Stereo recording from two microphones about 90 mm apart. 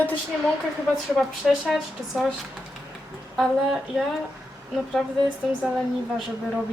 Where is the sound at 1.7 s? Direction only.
Centre (ahead or behind).